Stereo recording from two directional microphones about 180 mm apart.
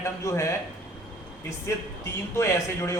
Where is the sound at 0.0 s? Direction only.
15° left (ahead or behind).